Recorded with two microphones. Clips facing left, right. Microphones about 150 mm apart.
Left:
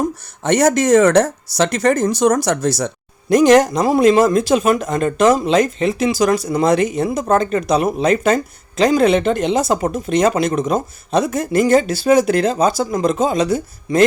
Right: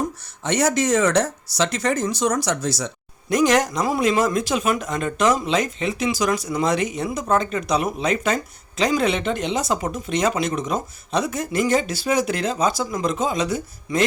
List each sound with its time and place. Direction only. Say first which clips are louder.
0.4 s speech: left 6 dB; 50° left (ahead or behind)
3.2 s a man's voice: left 7 dB; 35° left (ahead or behind)